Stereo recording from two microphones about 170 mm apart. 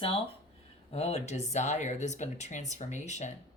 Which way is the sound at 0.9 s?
35° left (ahead or behind).